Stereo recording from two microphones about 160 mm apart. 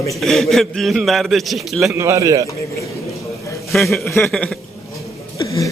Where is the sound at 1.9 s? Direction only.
20° right (ahead or behind).